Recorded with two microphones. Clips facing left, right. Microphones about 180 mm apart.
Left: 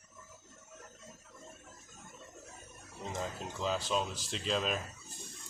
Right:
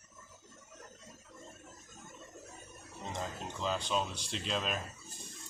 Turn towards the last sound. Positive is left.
turn(degrees=0)  # may be behind; listen again after turning